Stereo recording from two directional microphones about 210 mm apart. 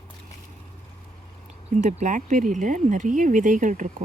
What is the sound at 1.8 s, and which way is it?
Speech, 35° right (ahead or behind).